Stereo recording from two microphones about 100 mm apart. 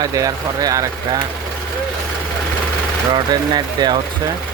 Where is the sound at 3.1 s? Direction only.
45° right (ahead or behind).